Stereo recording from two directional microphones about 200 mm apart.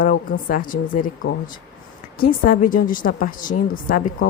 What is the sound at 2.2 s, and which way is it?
A woman's voice, 45° left (ahead or behind).